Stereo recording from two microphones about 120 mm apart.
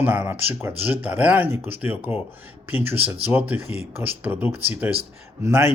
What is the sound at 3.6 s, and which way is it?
Speech, 60° left (ahead or behind).